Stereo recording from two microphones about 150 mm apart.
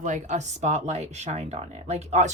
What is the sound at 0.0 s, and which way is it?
Speech, 55° right (ahead or behind).